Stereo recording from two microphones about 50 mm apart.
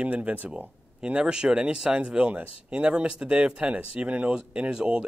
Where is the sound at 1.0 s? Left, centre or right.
Centre.